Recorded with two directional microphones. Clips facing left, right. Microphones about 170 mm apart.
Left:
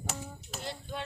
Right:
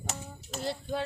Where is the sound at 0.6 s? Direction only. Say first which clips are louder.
Right 7 dB; 35° right (ahead or behind).